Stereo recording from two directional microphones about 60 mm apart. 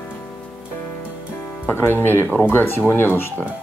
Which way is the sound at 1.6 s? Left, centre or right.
Left.